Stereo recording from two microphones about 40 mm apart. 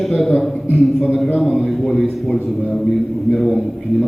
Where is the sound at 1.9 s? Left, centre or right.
Centre.